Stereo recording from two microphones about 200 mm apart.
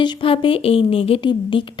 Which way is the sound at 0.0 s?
25° left (ahead or behind).